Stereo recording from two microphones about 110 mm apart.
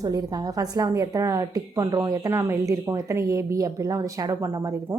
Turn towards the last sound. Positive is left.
turn(degrees=-30)  # may be behind; listen again after turning